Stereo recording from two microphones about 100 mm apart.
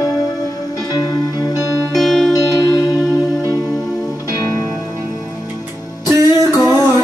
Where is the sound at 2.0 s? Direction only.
5° left (ahead or behind).